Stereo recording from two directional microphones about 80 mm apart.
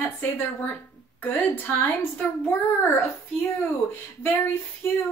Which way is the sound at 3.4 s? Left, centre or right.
Left.